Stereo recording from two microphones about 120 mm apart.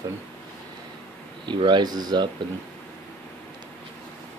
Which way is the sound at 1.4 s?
40° right (ahead or behind).